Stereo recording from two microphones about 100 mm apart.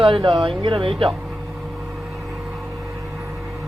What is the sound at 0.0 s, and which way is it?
Speech, 60° right (ahead or behind).